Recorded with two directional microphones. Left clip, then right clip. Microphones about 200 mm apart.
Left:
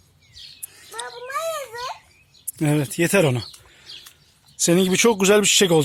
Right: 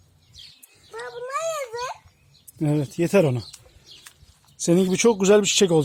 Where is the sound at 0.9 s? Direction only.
30° right (ahead or behind).